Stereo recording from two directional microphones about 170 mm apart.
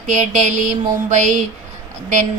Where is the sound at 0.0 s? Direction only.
45° right (ahead or behind).